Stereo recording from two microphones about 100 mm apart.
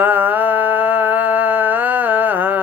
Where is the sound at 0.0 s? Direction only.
15° right (ahead or behind).